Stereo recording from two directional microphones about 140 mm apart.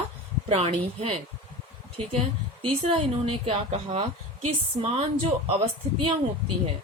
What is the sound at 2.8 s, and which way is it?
A woman's voice, 45° right (ahead or behind).